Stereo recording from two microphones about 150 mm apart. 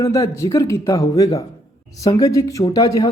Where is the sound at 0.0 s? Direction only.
20° left (ahead or behind).